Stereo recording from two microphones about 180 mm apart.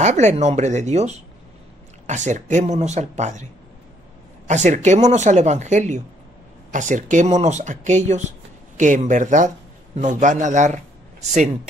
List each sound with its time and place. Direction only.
0.0 s speech: 40° right (ahead or behind)
4.5 s a man's voice: 40° right (ahead or behind)